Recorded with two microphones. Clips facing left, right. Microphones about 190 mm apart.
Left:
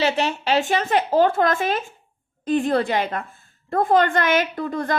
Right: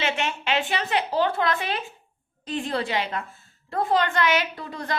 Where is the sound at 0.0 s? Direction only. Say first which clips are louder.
Left 6 dB; 35° left (ahead or behind).